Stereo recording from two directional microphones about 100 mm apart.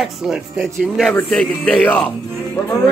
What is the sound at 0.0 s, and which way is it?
A man's voice, centre (ahead or behind).